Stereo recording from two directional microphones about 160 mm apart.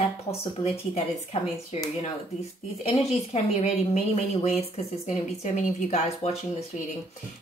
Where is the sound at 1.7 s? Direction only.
40° left (ahead or behind).